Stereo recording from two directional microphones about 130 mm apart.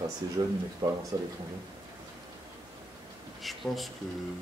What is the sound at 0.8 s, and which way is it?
Speech, 35° right (ahead or behind).